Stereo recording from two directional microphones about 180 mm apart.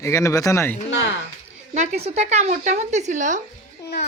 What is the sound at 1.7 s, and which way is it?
Speech, 40° right (ahead or behind).